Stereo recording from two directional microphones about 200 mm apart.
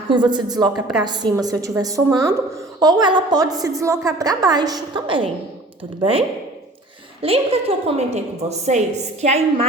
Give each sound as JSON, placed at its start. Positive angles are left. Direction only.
{"t": 0.1, "sound": "a woman's voice", "side_deg": -20}